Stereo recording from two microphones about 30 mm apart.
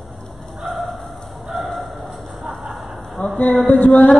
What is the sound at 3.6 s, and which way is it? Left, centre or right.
Music, left.